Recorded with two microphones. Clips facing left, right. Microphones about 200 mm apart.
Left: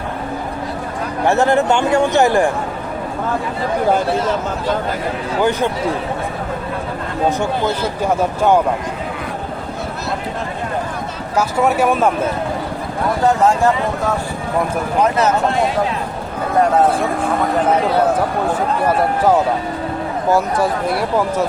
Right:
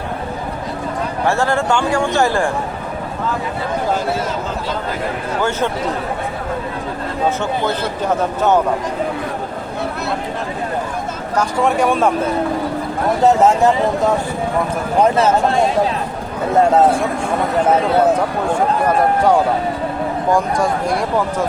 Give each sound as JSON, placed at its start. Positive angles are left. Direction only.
{"t": 1.3, "sound": "speech", "side_deg": 20}
{"t": 5.4, "sound": "speech", "side_deg": 15}
{"t": 8.0, "sound": "speech", "side_deg": 10}
{"t": 11.3, "sound": "speech", "side_deg": 5}
{"t": 13.2, "sound": "speech", "side_deg": -20}
{"t": 15.0, "sound": "speech", "side_deg": -30}
{"t": 20.3, "sound": "speech", "side_deg": 5}